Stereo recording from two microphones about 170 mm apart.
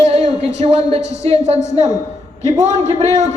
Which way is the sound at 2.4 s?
15° left (ahead or behind).